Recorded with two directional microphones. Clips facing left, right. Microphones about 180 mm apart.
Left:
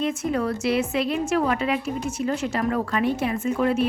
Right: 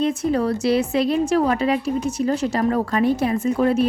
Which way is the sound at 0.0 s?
35° right (ahead or behind).